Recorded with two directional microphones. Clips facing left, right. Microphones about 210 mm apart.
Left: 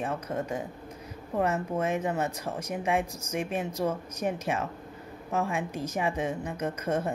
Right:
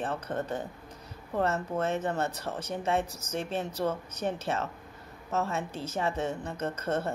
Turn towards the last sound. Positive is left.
turn(degrees=10)  # may be behind; listen again after turning